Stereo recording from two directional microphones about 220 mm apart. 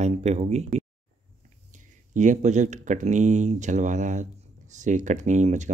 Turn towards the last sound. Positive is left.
turn(degrees=-35)  # may be behind; listen again after turning